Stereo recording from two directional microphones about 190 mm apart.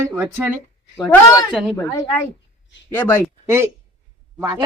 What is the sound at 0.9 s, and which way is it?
Speech, 15° left (ahead or behind).